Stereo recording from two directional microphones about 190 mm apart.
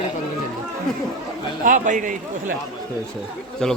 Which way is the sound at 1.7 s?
40° right (ahead or behind).